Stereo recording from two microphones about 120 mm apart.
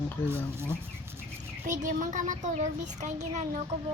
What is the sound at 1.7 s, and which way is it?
A child's voice, 90° right.